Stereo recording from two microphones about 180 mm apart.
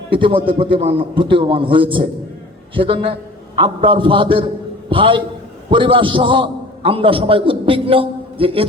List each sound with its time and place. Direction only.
0.1 s a man's voice: 30° right (ahead or behind)